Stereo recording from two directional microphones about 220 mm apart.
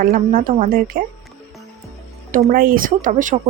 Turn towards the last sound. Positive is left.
turn(degrees=-35)  # may be behind; listen again after turning